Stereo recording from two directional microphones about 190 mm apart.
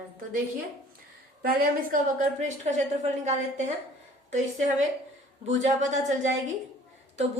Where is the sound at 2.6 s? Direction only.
40° right (ahead or behind).